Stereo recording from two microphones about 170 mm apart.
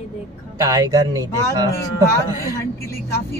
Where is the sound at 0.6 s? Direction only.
20° right (ahead or behind).